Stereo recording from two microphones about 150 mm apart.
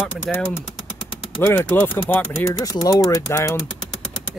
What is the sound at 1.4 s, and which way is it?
Speech, 10° left (ahead or behind).